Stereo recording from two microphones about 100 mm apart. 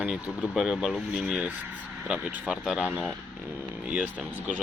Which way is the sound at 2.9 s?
20° right (ahead or behind).